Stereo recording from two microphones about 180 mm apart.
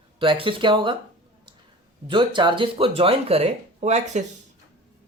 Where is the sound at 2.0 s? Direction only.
25° right (ahead or behind).